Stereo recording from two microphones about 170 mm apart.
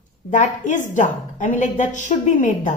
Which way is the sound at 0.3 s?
45° left (ahead or behind).